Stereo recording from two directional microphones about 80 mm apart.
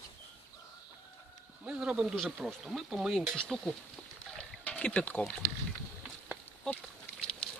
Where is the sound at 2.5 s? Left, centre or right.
Centre.